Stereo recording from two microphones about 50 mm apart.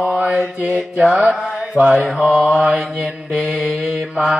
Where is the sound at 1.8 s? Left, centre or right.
Right.